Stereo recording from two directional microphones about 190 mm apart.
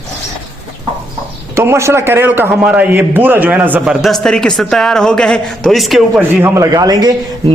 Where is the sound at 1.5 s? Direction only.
15° right (ahead or behind).